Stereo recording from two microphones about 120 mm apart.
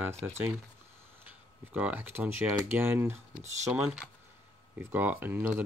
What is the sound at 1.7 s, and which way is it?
Speech, 10° right (ahead or behind).